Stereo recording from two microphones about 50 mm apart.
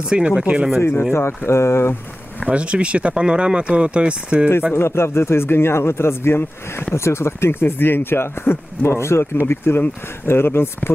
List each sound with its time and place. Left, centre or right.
0.4 s speech: centre
0.7 s speech: left
2.4 s speech: right
4.7 s speech: left